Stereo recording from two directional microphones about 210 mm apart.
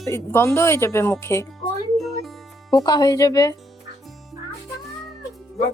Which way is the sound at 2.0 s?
Centre (ahead or behind).